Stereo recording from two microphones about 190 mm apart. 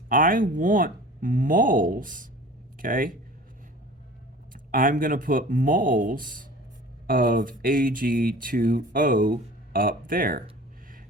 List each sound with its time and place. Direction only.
0.1 s speech: 45° right (ahead or behind)
4.5 s speech: 45° right (ahead or behind)